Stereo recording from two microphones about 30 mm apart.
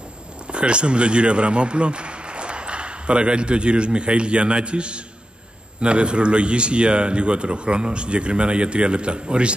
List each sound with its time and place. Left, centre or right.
0.5 s speech: right